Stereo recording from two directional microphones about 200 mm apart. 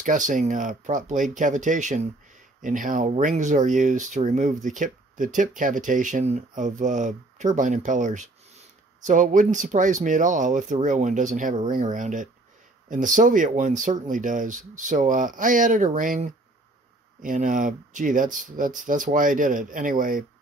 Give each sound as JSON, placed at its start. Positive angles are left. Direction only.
{"t": 0.0, "sound": "speech", "side_deg": -40}